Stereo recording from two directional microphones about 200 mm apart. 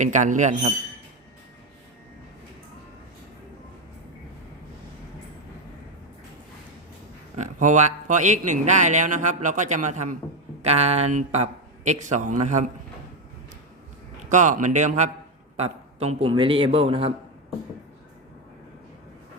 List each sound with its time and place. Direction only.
0.0 s a man's voice: 40° right (ahead or behind)
7.3 s a man's voice: 40° right (ahead or behind)
14.3 s a man's voice: 40° right (ahead or behind)